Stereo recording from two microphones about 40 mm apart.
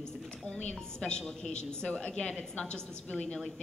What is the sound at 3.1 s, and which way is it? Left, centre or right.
Speech, left.